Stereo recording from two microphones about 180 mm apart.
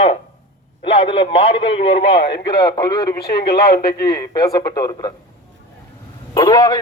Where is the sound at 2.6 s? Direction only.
20° left (ahead or behind).